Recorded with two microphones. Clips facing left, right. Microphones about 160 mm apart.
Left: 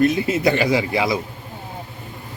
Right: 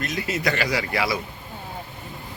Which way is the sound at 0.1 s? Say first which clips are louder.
Left 7 dB; 30° left (ahead or behind).